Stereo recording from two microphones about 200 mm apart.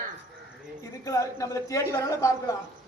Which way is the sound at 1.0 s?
15° left (ahead or behind).